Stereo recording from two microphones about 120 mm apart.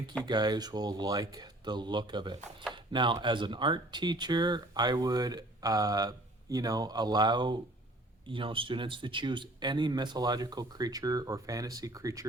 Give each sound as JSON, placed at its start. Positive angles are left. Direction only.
{"t": 0.3, "sound": "speech", "side_deg": -35}